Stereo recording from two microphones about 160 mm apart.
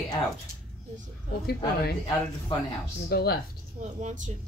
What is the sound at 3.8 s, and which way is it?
Speech, 50° right (ahead or behind).